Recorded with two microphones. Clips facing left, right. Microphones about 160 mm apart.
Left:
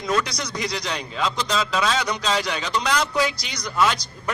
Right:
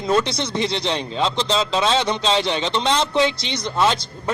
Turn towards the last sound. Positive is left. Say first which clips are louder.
# right 2 dB
turn(degrees=-25)  # may be behind; listen again after turning